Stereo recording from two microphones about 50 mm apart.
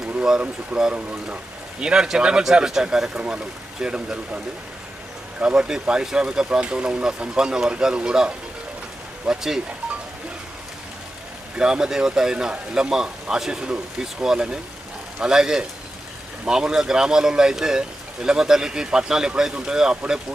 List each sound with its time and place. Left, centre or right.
0.7 s speech: centre
5.4 s speech: centre
11.5 s speech: centre